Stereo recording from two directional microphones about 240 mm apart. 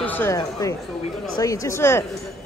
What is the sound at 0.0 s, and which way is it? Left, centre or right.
Speech, centre.